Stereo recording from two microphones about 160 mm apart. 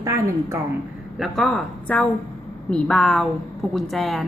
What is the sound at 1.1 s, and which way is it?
A woman's voice, centre (ahead or behind).